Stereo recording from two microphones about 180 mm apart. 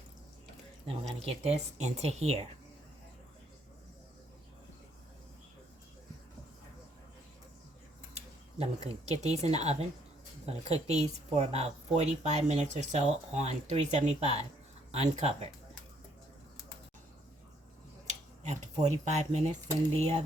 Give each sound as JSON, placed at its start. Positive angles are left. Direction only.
{"t": 0.9, "sound": "speech", "side_deg": -35}
{"t": 8.1, "sound": "a sound", "side_deg": -35}
{"t": 9.2, "sound": "speech", "side_deg": -35}
{"t": 18.1, "sound": "speech", "side_deg": -40}